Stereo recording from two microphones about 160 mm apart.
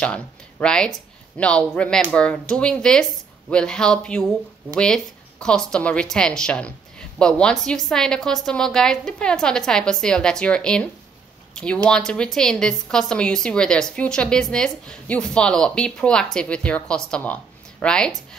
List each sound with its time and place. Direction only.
0.0 s a woman's voice: 5° left (ahead or behind)